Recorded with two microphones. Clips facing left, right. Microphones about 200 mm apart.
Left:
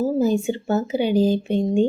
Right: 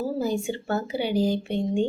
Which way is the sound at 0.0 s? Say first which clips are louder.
Left 7 dB; 20° left (ahead or behind).